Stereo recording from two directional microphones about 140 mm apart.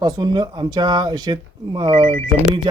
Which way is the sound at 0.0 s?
30° right (ahead or behind).